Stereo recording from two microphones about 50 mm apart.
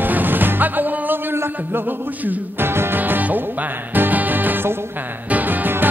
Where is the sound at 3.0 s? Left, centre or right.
Right.